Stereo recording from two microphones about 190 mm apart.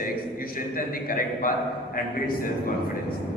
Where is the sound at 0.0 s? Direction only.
50° left (ahead or behind).